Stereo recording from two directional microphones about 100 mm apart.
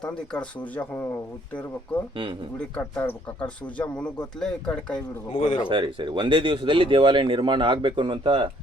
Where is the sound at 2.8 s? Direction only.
15° left (ahead or behind).